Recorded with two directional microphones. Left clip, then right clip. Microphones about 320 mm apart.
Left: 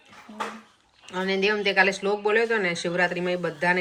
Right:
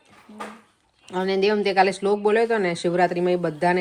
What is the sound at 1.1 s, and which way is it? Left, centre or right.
Speech, centre.